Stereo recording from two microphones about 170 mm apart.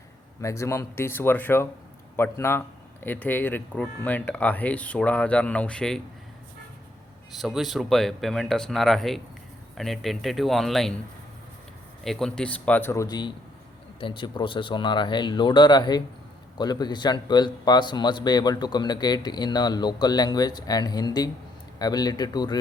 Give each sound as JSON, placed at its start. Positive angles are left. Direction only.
{"t": 0.4, "sound": "speech", "side_deg": 15}
{"t": 7.3, "sound": "speech", "side_deg": 0}
{"t": 12.0, "sound": "a man's voice", "side_deg": 5}